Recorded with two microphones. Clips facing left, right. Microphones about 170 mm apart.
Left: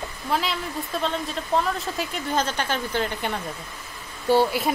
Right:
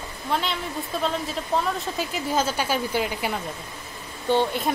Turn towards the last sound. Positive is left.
turn(degrees=5)  # may be behind; listen again after turning